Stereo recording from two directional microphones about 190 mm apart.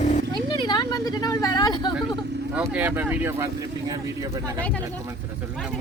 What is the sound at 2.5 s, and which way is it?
Speech, 5° right (ahead or behind).